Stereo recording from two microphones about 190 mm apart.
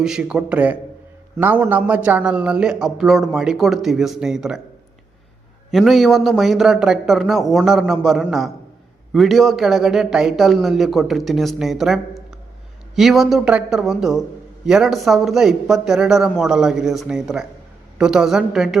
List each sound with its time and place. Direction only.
0.0 s a man's voice: 5° right (ahead or behind)
5.7 s a man's voice: centre (ahead or behind)
13.0 s a man's voice: centre (ahead or behind)